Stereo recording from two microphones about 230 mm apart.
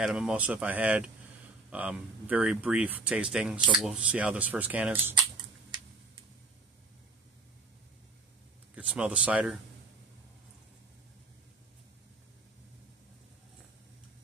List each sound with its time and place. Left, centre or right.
0.0 s speech: centre
5.1 s typing: centre
8.7 s speech: centre